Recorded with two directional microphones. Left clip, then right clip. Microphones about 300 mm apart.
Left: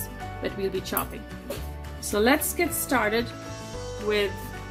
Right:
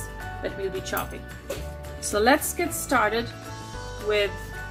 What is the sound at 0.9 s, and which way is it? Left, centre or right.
Speech, left.